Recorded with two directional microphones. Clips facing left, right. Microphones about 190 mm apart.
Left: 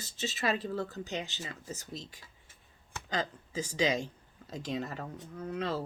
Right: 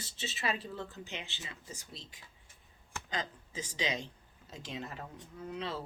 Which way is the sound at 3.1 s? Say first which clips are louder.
Left 5 dB; 40° left (ahead or behind).